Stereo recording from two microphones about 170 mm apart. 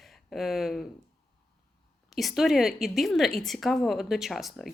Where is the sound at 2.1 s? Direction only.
Centre (ahead or behind).